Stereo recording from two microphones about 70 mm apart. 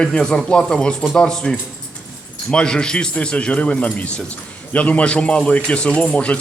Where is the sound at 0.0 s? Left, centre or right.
Centre.